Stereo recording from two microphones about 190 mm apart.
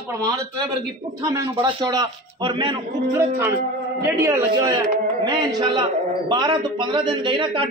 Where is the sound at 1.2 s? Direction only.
20° right (ahead or behind).